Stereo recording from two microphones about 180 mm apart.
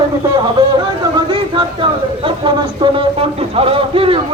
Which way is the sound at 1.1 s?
25° right (ahead or behind).